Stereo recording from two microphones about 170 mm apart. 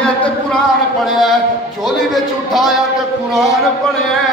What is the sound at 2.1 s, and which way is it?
Speech, centre (ahead or behind).